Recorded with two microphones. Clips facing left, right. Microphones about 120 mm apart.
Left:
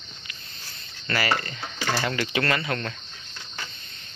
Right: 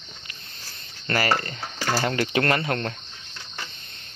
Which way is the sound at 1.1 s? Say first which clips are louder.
Right 2 dB; 40° right (ahead or behind).